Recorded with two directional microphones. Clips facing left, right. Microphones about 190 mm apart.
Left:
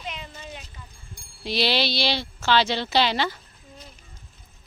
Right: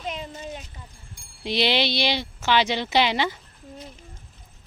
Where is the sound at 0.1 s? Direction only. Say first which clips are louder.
Right 7 dB; 40° right (ahead or behind).